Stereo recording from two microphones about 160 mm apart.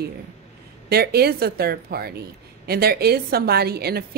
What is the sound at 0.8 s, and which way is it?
A woman's voice, 80° right.